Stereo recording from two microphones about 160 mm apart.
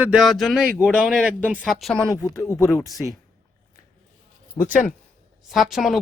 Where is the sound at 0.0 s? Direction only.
5° right (ahead or behind).